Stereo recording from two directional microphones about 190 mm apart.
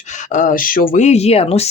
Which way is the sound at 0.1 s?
40° left (ahead or behind).